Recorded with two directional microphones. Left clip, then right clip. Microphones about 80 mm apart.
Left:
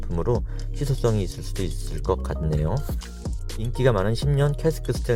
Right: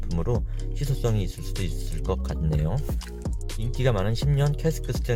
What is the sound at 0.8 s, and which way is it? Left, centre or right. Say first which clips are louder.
Speech: left 5 dB; left.